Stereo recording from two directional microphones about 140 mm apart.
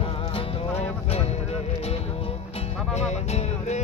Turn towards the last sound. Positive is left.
turn(degrees=50)  # may be behind; listen again after turning